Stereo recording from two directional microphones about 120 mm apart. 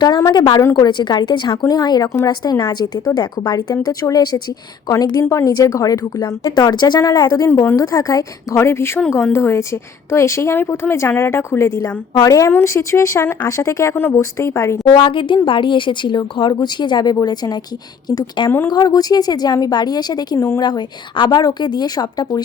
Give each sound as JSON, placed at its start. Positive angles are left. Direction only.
{"t": 0.0, "sound": "speech", "side_deg": 35}
{"t": 7.6, "sound": "a woman's voice", "side_deg": 20}
{"t": 7.9, "sound": "a woman's voice", "side_deg": 30}
{"t": 14.9, "sound": "a woman's voice", "side_deg": 45}